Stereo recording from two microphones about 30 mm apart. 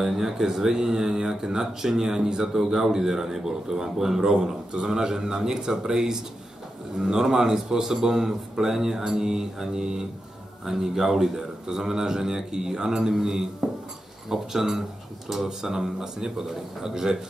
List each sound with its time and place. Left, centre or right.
0.0 s a man's voice: centre